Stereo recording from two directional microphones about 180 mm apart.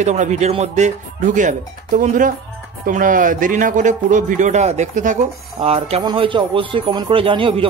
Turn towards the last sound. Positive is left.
turn(degrees=-30)  # may be behind; listen again after turning